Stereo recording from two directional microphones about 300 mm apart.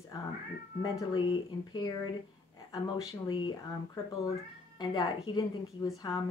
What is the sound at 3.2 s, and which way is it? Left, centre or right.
Speech, centre.